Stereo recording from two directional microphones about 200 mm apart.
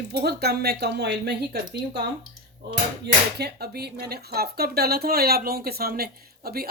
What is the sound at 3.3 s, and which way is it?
Speech, 55° right (ahead or behind).